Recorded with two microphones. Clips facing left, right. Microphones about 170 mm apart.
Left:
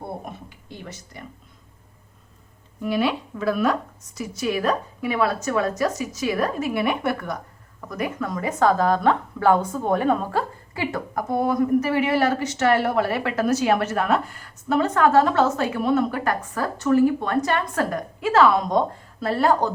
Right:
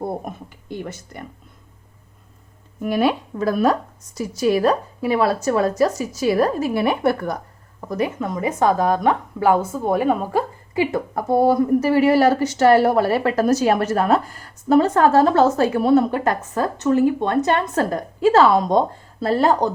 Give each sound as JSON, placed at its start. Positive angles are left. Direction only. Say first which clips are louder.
{"t": 0.3, "sound": "speech", "louder": "right 6 dB", "side_deg": -50}
{"t": 2.8, "sound": "a woman's voice", "louder": "right 4 dB", "side_deg": -45}
{"t": 11.1, "sound": "speech", "louder": "right 6 dB", "side_deg": -30}